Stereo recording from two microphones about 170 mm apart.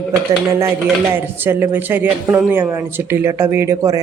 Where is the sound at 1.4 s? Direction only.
10° right (ahead or behind).